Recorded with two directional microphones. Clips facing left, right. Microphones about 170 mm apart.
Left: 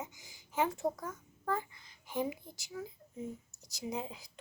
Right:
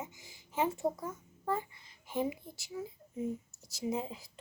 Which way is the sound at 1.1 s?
25° right (ahead or behind).